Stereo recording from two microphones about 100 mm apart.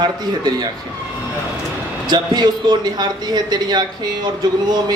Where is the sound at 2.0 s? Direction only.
45° right (ahead or behind).